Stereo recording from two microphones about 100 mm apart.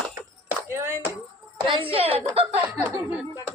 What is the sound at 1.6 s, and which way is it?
Speech, 55° right (ahead or behind).